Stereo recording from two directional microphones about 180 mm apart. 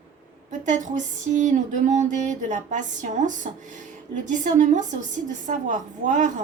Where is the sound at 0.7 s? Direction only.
45° right (ahead or behind).